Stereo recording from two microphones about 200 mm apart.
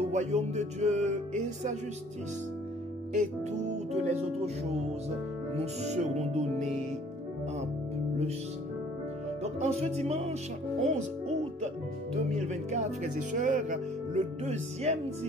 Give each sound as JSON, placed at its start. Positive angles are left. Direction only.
{"t": 0.1, "sound": "speech", "side_deg": -35}
{"t": 3.1, "sound": "speech", "side_deg": -35}
{"t": 5.6, "sound": "speech", "side_deg": -35}
{"t": 9.4, "sound": "speech", "side_deg": -30}